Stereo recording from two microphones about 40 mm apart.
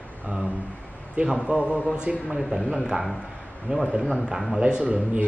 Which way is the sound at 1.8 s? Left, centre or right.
Right.